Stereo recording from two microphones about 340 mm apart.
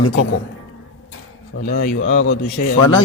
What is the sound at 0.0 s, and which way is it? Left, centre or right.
Speech, left.